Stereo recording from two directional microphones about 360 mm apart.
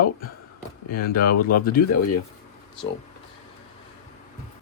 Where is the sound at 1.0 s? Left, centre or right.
Left.